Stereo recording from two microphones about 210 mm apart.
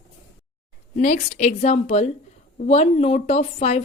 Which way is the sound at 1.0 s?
35° left (ahead or behind).